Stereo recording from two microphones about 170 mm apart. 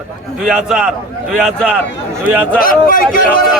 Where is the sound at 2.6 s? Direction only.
55° left (ahead or behind).